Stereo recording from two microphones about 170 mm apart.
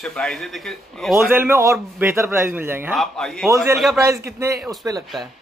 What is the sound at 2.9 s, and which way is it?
A man's voice, centre (ahead or behind).